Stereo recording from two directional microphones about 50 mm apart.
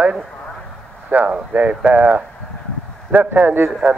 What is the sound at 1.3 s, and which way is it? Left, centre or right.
A man's voice, right.